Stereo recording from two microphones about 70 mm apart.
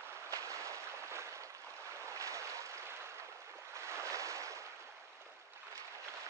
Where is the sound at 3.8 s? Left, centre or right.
Right.